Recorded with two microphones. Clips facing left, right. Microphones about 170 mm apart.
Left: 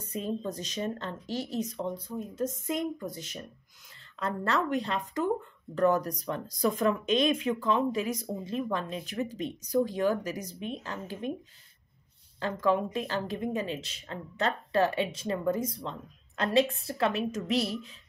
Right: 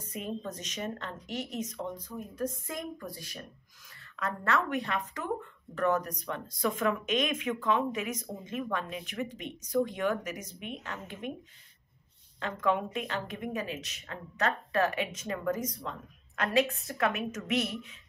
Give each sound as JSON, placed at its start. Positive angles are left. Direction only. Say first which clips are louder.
{"t": 0.0, "sound": "a woman's voice", "louder": "left 4 dB", "side_deg": 30}
{"t": 12.4, "sound": "a woman's voice", "louder": "left 3 dB", "side_deg": 35}